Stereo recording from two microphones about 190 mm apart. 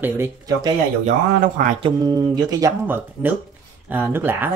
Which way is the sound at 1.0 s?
45° right (ahead or behind).